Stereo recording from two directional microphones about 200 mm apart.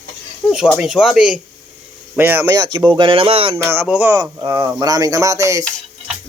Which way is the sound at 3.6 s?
10° right (ahead or behind).